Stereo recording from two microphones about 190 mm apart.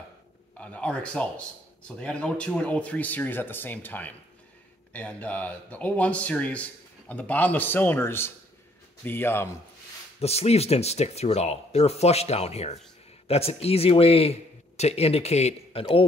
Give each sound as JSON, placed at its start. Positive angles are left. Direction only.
{"t": 0.6, "sound": "a man's voice", "side_deg": 5}
{"t": 10.2, "sound": "speech", "side_deg": 35}